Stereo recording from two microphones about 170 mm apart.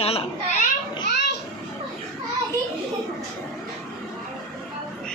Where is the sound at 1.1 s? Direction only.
85° left.